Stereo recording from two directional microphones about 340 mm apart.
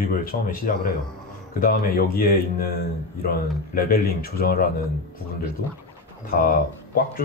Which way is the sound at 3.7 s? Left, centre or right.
Left.